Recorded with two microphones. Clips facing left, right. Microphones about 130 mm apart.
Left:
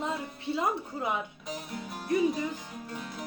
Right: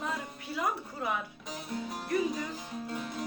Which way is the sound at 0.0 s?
25° left (ahead or behind).